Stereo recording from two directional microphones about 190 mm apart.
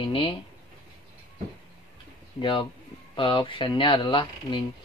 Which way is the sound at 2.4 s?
25° left (ahead or behind).